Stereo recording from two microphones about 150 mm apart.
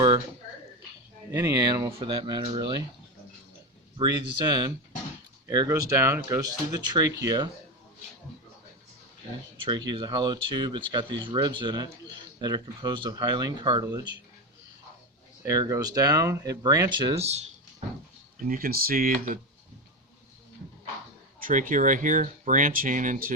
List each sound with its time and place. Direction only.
1.3 s speech: 20° right (ahead or behind)
3.9 s speech: 30° right (ahead or behind)
9.6 s speech: 30° right (ahead or behind)
15.4 s speech: 20° right (ahead or behind)
17.2 s a sound: 45° right (ahead or behind)
18.3 s speech: 70° right (ahead or behind)
21.3 s speech: 65° right (ahead or behind)